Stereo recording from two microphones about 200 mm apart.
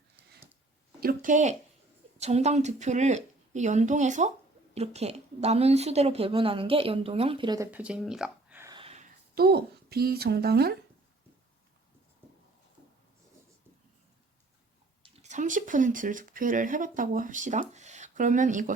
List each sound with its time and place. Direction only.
0.9 s a woman's voice: 45° right (ahead or behind); by 7.7 s 20° right (ahead or behind)
7.7 s speech: 5° right (ahead or behind)
8.7 s a sound: 30° right (ahead or behind)
9.3 s a woman's voice: 50° right (ahead or behind)
15.0 s speech: 30° right (ahead or behind)